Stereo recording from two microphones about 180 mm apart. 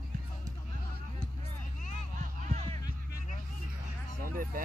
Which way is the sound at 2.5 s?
40° right (ahead or behind).